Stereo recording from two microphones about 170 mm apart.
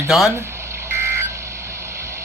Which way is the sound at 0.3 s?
15° right (ahead or behind).